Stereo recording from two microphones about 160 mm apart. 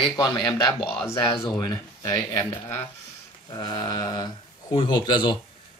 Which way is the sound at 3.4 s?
25° left (ahead or behind).